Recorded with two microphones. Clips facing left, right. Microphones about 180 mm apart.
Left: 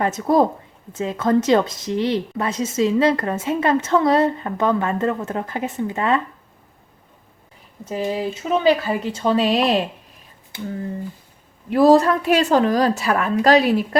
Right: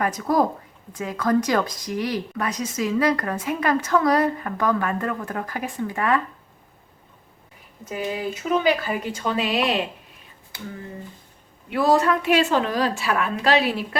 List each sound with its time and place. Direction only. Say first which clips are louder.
0.0 s a woman's voice: left 4 dB; 25° left (ahead or behind)
7.9 s a woman's voice: left 4 dB; 30° left (ahead or behind)
11.7 s a woman's voice: left 6 dB; 35° left (ahead or behind)